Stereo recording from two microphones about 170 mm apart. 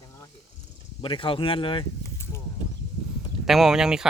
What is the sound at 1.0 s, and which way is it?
Speech, 30° left (ahead or behind).